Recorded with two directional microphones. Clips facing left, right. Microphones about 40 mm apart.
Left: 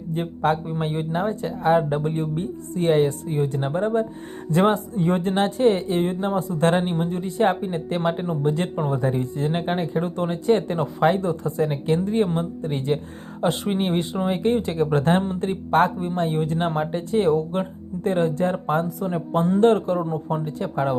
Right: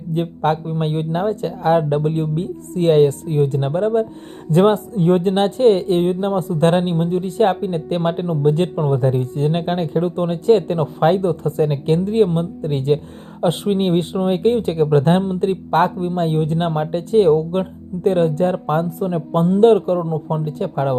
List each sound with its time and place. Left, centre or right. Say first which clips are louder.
0.1 s speech: right 3 dB; right